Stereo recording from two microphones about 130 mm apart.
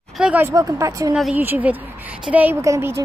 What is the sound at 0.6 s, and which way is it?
Speech, 25° right (ahead or behind).